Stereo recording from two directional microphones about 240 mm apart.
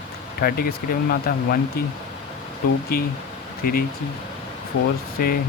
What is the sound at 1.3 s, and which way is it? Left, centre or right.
Speech, left.